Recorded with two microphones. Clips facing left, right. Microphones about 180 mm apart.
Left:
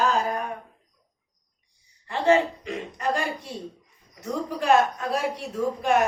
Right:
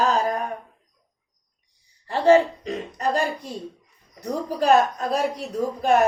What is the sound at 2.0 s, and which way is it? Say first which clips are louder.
A woman's voice: right 4 dB; 35° right (ahead or behind).